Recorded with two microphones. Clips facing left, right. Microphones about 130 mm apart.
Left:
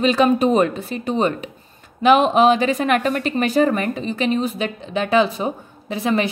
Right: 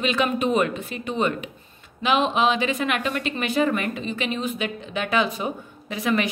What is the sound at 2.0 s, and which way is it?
Speech, 45° left (ahead or behind).